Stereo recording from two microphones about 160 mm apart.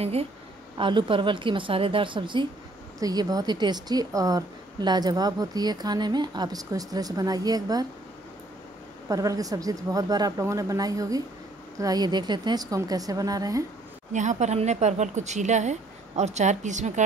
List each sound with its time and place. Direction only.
0.0 s a woman's voice: 40° right (ahead or behind); by 7.8 s 25° right (ahead or behind)
9.1 s a woman's voice: 20° right (ahead or behind)
14.1 s speech: 45° right (ahead or behind)